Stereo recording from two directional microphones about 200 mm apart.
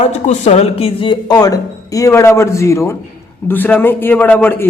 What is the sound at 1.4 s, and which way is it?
A man's voice, 15° left (ahead or behind).